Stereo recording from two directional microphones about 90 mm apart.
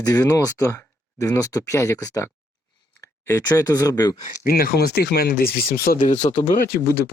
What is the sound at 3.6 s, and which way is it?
Speech, 40° left (ahead or behind).